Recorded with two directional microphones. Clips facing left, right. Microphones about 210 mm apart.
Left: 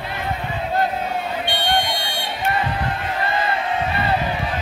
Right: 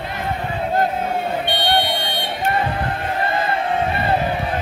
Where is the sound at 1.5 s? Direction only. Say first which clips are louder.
Right 1 dB; 10° left (ahead or behind).